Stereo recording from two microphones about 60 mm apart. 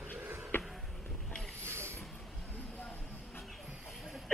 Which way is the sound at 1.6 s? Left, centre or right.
Right.